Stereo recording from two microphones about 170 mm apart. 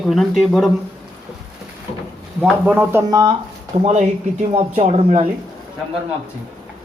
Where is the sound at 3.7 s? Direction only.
40° right (ahead or behind).